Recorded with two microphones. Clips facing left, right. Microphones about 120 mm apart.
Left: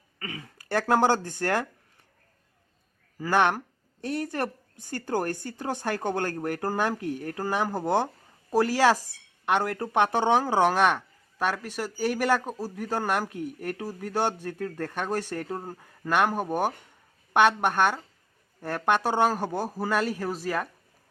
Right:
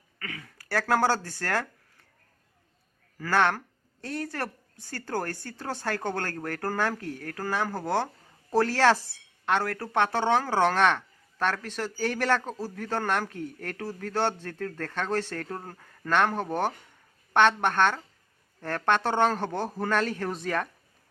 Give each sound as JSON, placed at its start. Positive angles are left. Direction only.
{"t": 0.2, "sound": "speech", "side_deg": 25}
{"t": 3.2, "sound": "speech", "side_deg": 15}